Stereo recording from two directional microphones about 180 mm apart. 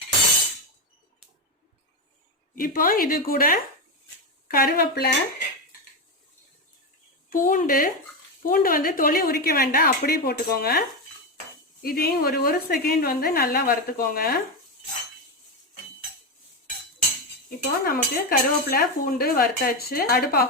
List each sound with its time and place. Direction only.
2.6 s speech: 50° left (ahead or behind)
7.3 s speech: 50° left (ahead or behind)
17.6 s speech: 55° left (ahead or behind)